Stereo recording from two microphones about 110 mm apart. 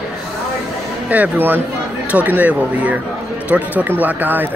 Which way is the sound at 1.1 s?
15° right (ahead or behind).